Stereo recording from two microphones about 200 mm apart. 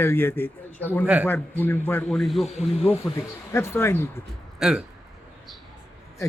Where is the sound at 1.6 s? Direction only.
10° left (ahead or behind).